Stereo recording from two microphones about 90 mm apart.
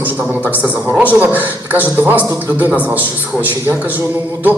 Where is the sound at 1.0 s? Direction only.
20° right (ahead or behind).